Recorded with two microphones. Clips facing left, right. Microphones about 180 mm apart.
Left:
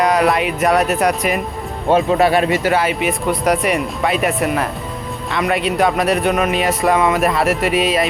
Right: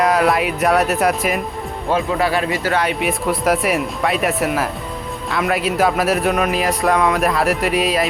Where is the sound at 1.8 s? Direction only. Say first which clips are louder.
Left 5 dB; 25° left (ahead or behind).